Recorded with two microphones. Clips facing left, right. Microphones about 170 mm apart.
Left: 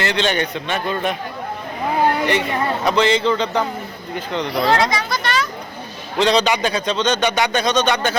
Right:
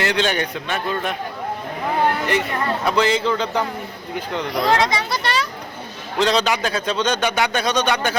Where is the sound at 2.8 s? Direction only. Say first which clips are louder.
Left 2 dB; 5° right (ahead or behind).